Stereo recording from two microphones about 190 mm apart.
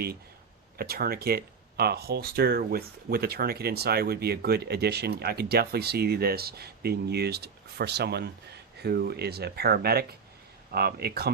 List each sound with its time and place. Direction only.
0.8 s speech: 55° right (ahead or behind)